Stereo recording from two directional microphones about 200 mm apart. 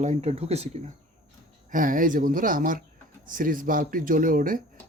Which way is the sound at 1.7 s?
45° right (ahead or behind).